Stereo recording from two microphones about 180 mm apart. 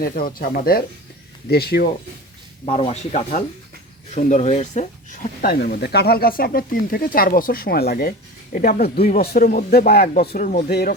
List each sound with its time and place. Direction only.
0.0 s speech: 55° left (ahead or behind)
2.6 s speech: 35° left (ahead or behind); by 10.9 s 60° left (ahead or behind)